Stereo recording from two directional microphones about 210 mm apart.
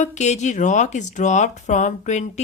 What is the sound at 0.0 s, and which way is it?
Speech, 35° left (ahead or behind).